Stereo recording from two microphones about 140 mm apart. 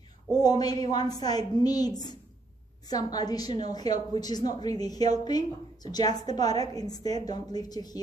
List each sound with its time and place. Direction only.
0.6 s a woman's voice: 30° left (ahead or behind)